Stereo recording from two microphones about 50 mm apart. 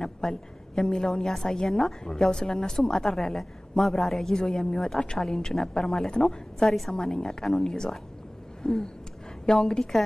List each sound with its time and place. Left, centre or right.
0.0 s a woman's voice: centre